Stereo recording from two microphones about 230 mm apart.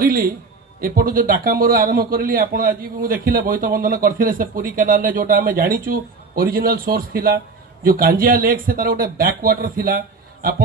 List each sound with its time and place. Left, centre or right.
0.0 s a man's voice: right